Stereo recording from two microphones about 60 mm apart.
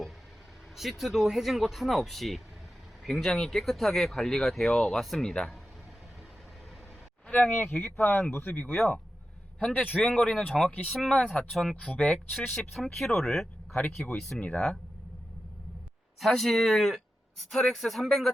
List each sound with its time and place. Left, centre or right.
0.8 s speech: centre
5.3 s speech: centre
7.3 s speech: left
9.6 s speech: centre
11.5 s speech: centre
11.8 s speech: centre
16.2 s speech: centre